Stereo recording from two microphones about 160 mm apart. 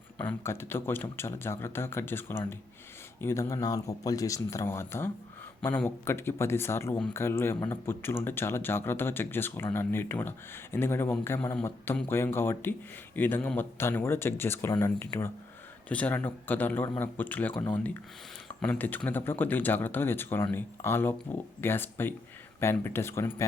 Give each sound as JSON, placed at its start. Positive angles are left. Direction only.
{"t": 0.2, "sound": "speech", "side_deg": 15}
{"t": 18.6, "sound": "speech", "side_deg": 10}